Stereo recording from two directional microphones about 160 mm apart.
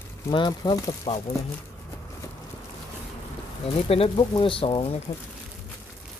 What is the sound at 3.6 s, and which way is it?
Speech, 35° left (ahead or behind).